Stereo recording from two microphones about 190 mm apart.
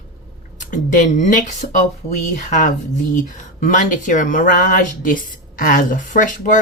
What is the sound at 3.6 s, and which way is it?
Speech, 45° left (ahead or behind).